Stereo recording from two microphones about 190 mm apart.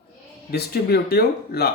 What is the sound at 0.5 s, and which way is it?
Speech, 55° left (ahead or behind).